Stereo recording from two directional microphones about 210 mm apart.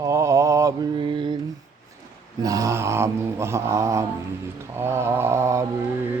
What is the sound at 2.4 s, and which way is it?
Mantra, 15° right (ahead or behind).